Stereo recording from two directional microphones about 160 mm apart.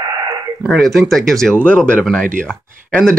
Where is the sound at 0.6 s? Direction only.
Centre (ahead or behind).